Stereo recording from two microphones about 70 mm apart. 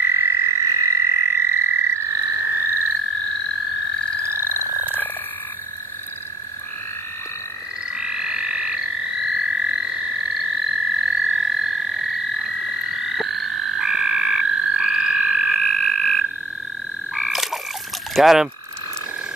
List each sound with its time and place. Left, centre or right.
0.0 s frog: right
4.2 s frog: right
7.9 s frog: centre
18.1 s speech: centre